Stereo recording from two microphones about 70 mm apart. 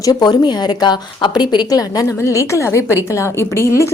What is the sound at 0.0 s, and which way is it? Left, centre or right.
A woman's voice, left.